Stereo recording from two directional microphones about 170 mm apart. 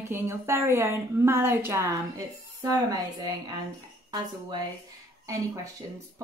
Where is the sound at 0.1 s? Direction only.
15° right (ahead or behind).